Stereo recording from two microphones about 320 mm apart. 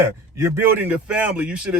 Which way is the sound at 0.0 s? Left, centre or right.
Centre.